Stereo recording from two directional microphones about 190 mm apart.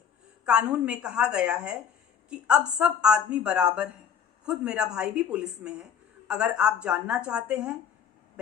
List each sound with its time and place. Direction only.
0.4 s a woman's voice: 5° right (ahead or behind)